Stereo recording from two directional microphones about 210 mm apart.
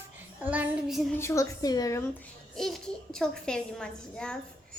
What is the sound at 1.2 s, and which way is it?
Speech, 15° left (ahead or behind).